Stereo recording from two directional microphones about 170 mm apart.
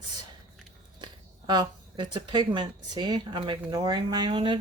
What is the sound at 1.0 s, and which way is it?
Speech, 25° right (ahead or behind).